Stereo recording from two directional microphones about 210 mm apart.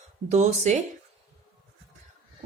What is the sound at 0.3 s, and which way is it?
Speech, 35° right (ahead or behind).